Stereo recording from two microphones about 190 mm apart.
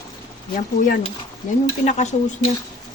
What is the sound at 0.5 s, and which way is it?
A woman's voice, 45° left (ahead or behind).